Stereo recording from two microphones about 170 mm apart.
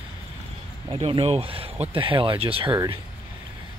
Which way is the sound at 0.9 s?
30° right (ahead or behind).